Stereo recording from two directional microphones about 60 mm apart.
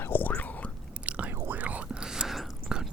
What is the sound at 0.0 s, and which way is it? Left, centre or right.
Whispering, left.